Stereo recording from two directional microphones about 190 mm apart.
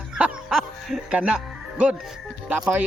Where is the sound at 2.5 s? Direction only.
5° right (ahead or behind).